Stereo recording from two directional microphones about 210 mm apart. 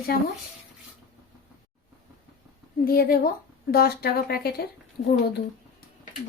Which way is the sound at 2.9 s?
45° left (ahead or behind).